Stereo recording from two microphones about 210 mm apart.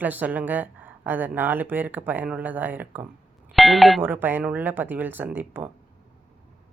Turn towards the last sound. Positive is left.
turn(degrees=-10)  # may be behind; listen again after turning